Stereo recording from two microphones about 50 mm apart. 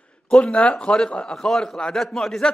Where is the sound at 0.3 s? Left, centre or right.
Left.